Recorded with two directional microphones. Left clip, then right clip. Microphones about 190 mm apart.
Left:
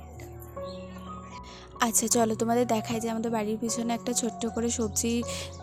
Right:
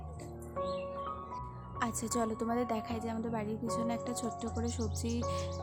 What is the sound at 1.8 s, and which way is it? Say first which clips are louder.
A woman's voice: left 9 dB; 40° left (ahead or behind).